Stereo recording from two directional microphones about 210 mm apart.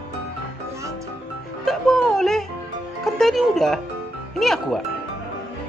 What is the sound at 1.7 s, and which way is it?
Music, centre (ahead or behind).